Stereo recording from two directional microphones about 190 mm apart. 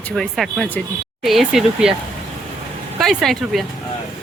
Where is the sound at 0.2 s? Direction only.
Centre (ahead or behind).